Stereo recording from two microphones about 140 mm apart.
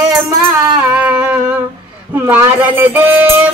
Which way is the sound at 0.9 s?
10° right (ahead or behind).